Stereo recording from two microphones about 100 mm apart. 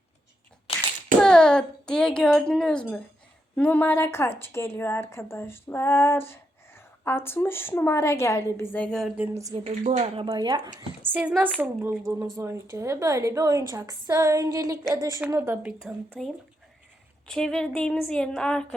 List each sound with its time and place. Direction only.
1.2 s a child's voice: 5° left (ahead or behind)
9.3 s a woman's voice: 35° right (ahead or behind)
9.6 s speech: 70° right (ahead or behind)
10.3 s speech: 45° right (ahead or behind)
11.0 s a woman's voice: 15° right (ahead or behind)
15.9 s speech: 5° right (ahead or behind)
17.2 s speech: 5° left (ahead or behind)